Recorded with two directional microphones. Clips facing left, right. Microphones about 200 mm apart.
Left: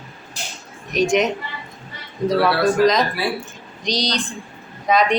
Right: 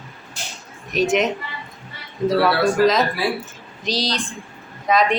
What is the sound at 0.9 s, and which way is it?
Speech, 5° right (ahead or behind).